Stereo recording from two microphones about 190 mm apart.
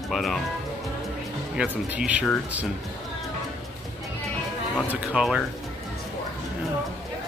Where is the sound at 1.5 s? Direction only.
5° right (ahead or behind).